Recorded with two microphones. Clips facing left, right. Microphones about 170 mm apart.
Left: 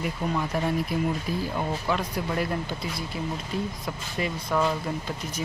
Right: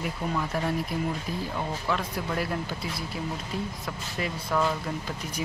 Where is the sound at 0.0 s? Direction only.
5° left (ahead or behind).